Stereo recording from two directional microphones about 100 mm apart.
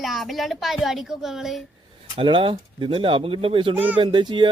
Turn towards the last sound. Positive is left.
turn(degrees=-55)  # may be behind; listen again after turning